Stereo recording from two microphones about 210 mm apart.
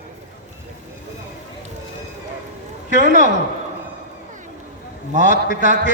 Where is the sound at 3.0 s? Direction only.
35° right (ahead or behind).